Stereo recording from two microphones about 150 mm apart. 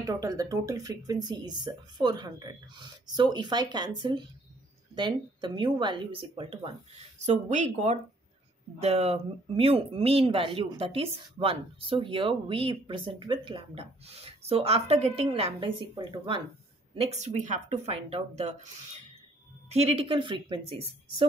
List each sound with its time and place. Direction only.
0.0 s speech: 25° right (ahead or behind)
7.2 s speech: 50° right (ahead or behind); by 16.4 s 30° right (ahead or behind)
16.9 s speech: 45° right (ahead or behind)
19.7 s speech: 45° right (ahead or behind)